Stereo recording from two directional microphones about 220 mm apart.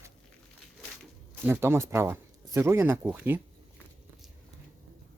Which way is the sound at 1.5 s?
10° right (ahead or behind).